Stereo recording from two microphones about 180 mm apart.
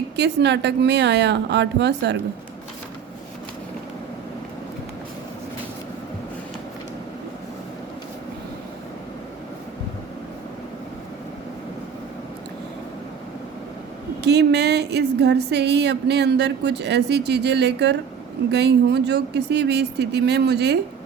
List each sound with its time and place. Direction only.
0.2 s a woman's voice: 75° right (ahead or behind)
14.3 s a woman's voice: 70° right (ahead or behind)